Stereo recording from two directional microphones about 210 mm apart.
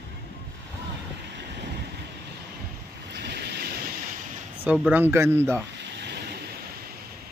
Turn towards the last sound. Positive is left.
turn(degrees=-50)  # may be behind; listen again after turning